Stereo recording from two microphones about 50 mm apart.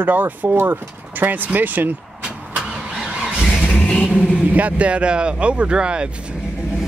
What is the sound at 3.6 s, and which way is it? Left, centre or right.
Vehicle, centre.